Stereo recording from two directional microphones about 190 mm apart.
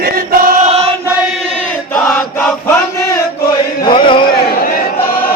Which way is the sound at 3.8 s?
25° left (ahead or behind).